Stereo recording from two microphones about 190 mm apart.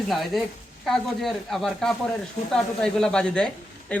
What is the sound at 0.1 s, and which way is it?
Speech, centre (ahead or behind).